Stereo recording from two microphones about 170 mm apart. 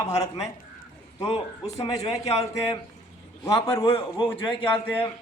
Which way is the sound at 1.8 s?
40° left (ahead or behind).